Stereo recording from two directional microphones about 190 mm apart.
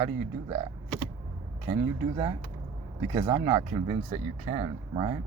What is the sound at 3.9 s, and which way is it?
Speech, 30° right (ahead or behind).